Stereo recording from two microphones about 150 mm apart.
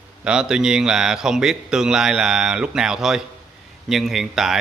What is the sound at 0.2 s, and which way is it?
Speech, 5° right (ahead or behind).